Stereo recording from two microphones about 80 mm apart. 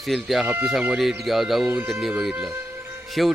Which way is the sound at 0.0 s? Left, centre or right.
Centre.